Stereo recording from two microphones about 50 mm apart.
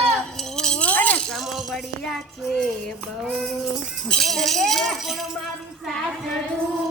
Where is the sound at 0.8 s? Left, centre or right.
Left.